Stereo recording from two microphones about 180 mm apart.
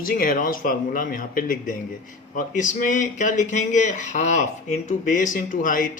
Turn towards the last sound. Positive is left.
turn(degrees=50)  # may be behind; listen again after turning